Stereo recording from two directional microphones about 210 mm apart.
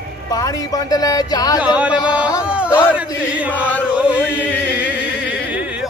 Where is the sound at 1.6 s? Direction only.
5° right (ahead or behind).